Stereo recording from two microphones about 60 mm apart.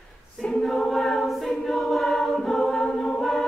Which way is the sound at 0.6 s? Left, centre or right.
Centre.